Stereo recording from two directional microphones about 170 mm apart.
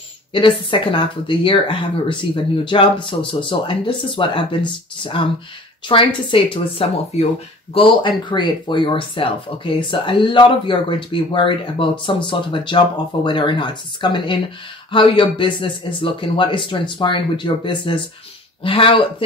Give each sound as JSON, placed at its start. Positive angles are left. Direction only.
{"t": 0.3, "sound": "speech", "side_deg": 30}
{"t": 5.9, "sound": "speech", "side_deg": 30}